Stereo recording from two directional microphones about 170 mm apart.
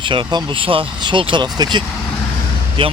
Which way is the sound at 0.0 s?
30° right (ahead or behind).